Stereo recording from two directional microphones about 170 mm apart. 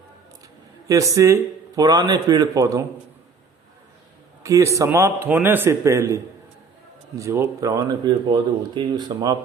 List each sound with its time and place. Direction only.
0.9 s speech: 20° right (ahead or behind)
4.4 s a man's voice: 20° right (ahead or behind)